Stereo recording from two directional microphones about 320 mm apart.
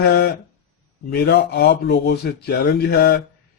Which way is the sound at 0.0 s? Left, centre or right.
Left.